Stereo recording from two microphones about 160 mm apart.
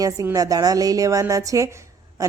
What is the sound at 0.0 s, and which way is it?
A woman's voice, 20° right (ahead or behind).